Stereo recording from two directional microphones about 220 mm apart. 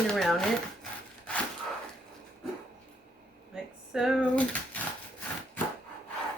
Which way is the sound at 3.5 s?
Centre (ahead or behind).